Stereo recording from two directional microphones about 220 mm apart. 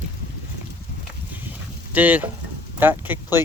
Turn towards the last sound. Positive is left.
turn(degrees=-10)  # may be behind; listen again after turning